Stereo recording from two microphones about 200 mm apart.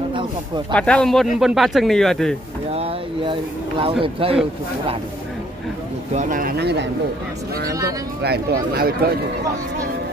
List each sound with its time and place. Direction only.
0.7 s speech: 5° left (ahead or behind)
2.7 s a sound: 25° right (ahead or behind)
4.0 s speech: 25° right (ahead or behind)
6.1 s speech: 40° right (ahead or behind)
8.2 s speech: 50° right (ahead or behind)